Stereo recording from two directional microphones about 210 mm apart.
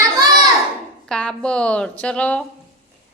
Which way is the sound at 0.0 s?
15° right (ahead or behind).